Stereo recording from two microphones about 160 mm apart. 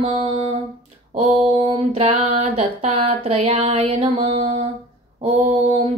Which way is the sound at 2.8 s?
40° right (ahead or behind).